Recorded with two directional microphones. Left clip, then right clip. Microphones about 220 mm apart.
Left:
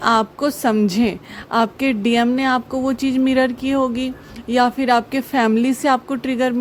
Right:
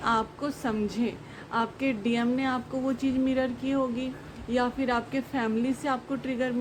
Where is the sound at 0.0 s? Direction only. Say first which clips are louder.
Left 11 dB; 45° left (ahead or behind).